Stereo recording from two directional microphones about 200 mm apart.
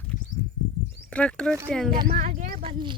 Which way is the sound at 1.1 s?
5° left (ahead or behind).